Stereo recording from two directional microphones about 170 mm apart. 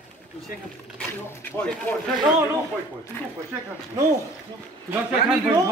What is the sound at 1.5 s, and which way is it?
Speech, 10° left (ahead or behind).